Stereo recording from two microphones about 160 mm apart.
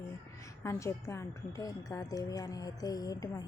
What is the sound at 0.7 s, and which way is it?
A woman's voice, 20° left (ahead or behind).